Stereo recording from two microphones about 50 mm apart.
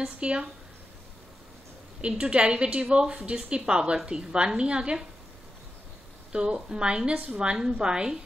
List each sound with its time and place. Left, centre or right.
0.0 s a woman's voice: centre
2.0 s a woman's voice: centre
6.3 s a woman's voice: centre